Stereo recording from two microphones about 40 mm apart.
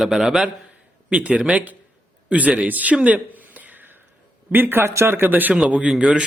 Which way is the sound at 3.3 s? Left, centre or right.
Right.